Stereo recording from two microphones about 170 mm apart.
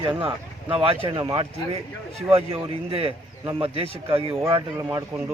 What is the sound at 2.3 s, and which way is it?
Speech, 35° right (ahead or behind).